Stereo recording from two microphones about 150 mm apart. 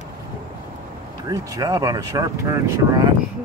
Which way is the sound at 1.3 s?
25° right (ahead or behind).